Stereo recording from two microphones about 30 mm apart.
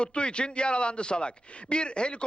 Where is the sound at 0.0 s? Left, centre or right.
Left.